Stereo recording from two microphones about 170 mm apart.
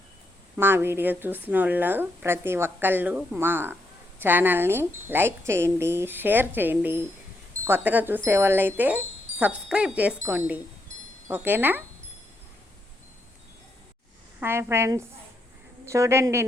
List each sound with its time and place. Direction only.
0.5 s a woman's voice: 10° right (ahead or behind)
14.4 s a woman's voice: 15° right (ahead or behind)